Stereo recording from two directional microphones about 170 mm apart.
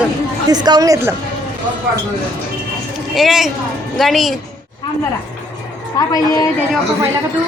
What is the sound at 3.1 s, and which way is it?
A woman's voice, centre (ahead or behind).